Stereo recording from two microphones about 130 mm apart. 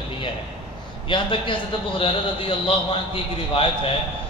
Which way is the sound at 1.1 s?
40° left (ahead or behind).